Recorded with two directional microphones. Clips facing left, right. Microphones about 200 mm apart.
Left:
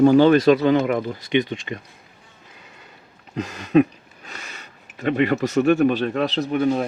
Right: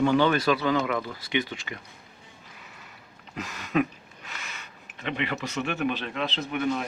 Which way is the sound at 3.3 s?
30° left (ahead or behind).